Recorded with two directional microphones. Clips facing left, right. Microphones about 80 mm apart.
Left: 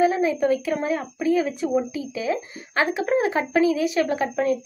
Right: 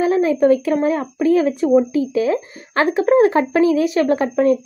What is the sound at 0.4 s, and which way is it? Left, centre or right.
A woman's voice, right.